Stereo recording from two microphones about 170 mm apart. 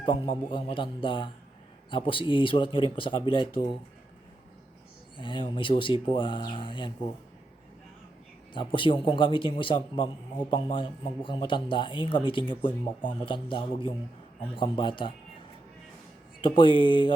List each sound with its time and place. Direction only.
0.3 s speech: 30° left (ahead or behind)
5.1 s speech: 30° left (ahead or behind)
8.5 s speech: 30° left (ahead or behind)
16.4 s speech: 30° left (ahead or behind)